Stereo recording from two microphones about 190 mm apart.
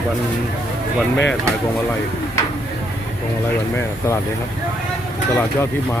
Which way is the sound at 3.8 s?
15° left (ahead or behind).